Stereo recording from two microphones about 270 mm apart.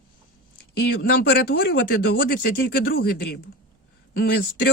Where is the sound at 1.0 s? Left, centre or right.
Left.